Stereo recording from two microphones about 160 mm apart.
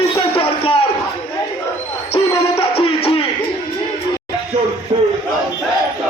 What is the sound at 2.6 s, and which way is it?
Music, 35° left (ahead or behind).